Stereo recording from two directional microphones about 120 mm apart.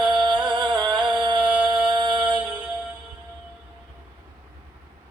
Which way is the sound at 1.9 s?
40° right (ahead or behind).